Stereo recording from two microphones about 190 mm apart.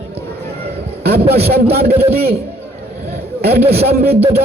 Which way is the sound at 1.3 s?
55° right (ahead or behind).